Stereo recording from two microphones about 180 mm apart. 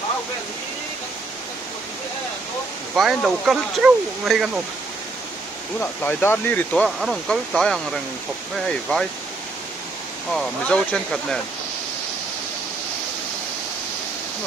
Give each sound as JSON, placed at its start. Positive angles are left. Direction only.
{"t": 2.9, "sound": "speech", "side_deg": 0}
{"t": 5.8, "sound": "speech", "side_deg": 10}
{"t": 10.3, "sound": "speech", "side_deg": 5}